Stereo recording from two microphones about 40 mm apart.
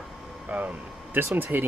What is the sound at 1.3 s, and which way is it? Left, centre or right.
Speech, right.